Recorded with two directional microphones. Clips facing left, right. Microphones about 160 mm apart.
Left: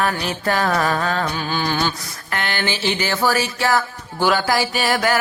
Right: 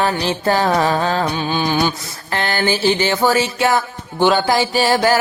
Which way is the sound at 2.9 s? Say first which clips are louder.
Right 4 dB; 25° right (ahead or behind).